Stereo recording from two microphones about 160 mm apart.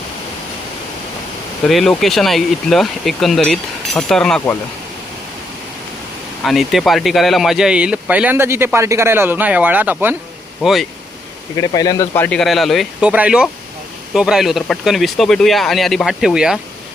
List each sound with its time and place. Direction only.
1.6 s speech: centre (ahead or behind)
6.4 s speech: centre (ahead or behind)
10.6 s speech: centre (ahead or behind)
11.5 s speech: 25° left (ahead or behind)
12.1 s speech: 10° left (ahead or behind)